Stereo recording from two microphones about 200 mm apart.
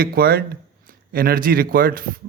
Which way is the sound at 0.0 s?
50° right (ahead or behind).